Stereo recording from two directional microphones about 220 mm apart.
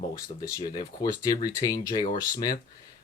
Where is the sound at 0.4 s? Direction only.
15° left (ahead or behind).